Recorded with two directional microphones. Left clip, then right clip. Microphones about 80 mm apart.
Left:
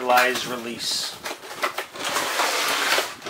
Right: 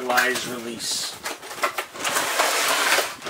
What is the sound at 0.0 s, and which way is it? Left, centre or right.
Speech, centre.